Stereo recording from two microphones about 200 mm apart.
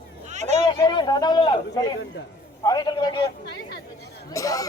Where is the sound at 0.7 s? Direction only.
20° left (ahead or behind).